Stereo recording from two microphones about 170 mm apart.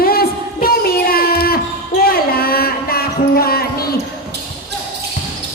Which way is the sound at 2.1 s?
60° left (ahead or behind).